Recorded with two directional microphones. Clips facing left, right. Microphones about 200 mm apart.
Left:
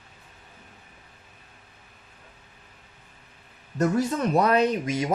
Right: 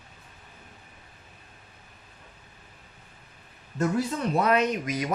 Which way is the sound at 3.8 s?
45° left (ahead or behind).